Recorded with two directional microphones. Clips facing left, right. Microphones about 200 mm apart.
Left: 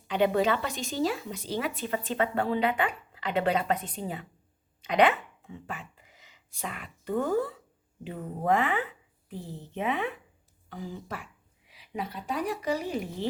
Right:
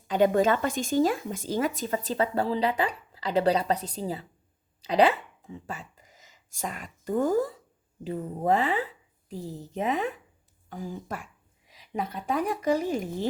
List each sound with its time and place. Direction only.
0.1 s speech: 45° right (ahead or behind)